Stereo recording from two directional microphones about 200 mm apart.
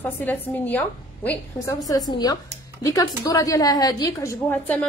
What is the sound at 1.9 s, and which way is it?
A woman's voice, 20° left (ahead or behind).